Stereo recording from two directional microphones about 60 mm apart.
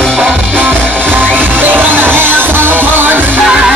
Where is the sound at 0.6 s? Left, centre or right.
Right.